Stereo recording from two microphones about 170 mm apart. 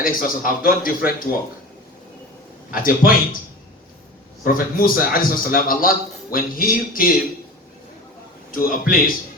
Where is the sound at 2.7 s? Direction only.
55° left (ahead or behind).